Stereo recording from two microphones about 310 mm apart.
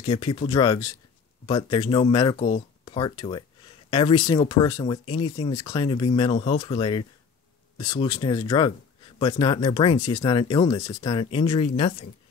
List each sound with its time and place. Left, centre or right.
0.0 s speech: centre